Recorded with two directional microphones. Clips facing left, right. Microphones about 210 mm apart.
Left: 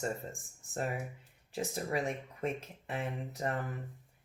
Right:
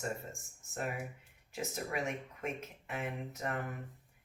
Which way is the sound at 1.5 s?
35° left (ahead or behind).